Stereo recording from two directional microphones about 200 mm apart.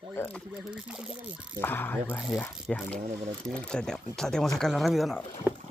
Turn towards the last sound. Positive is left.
turn(degrees=0)  # may be behind; listen again after turning